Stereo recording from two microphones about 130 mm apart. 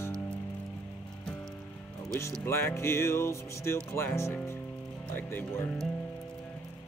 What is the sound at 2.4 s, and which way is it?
Music, 20° left (ahead or behind).